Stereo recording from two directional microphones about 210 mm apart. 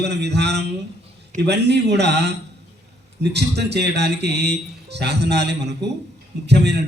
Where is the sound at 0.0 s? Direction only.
55° right (ahead or behind).